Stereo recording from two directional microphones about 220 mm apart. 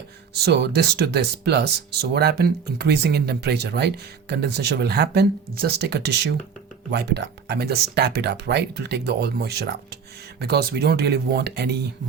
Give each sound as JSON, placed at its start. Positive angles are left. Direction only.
{"t": 0.3, "sound": "speech", "side_deg": -45}